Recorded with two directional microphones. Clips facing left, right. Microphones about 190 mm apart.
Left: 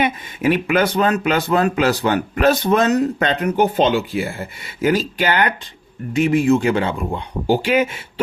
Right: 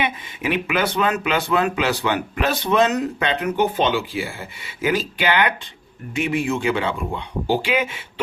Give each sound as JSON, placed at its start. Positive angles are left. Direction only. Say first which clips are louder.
{"t": 0.0, "sound": "speech", "louder": "left 6 dB", "side_deg": 45}